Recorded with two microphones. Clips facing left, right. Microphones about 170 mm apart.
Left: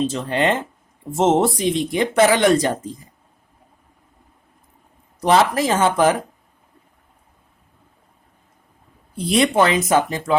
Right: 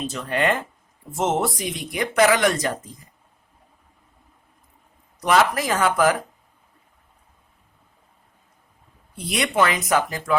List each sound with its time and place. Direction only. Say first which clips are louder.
0.0 s speech: left 4 dB; 25° left (ahead or behind)
5.2 s speech: left 3 dB; 30° left (ahead or behind)
9.1 s speech: left 5 dB; 30° left (ahead or behind)